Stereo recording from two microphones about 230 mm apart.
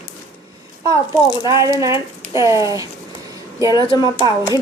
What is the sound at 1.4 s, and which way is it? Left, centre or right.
Speech, centre.